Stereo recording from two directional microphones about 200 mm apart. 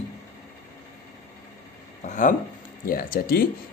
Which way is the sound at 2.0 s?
40° left (ahead or behind).